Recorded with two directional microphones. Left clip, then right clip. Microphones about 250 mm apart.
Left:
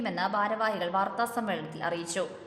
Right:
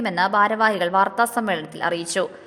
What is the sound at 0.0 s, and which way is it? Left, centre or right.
A woman's voice, right.